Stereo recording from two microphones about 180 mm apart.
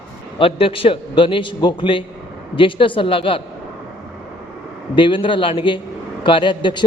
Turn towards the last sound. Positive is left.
turn(degrees=25)  # may be behind; listen again after turning